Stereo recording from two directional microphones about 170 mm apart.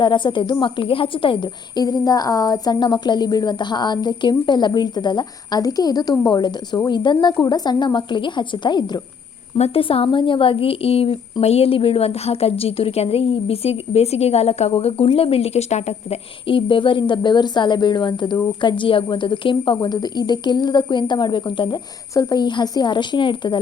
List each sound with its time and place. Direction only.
0.0 s a woman's voice: 25° left (ahead or behind)